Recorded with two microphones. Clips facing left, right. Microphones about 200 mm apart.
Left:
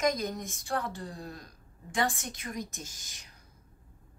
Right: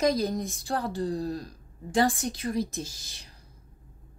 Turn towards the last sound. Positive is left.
turn(degrees=-35)  # may be behind; listen again after turning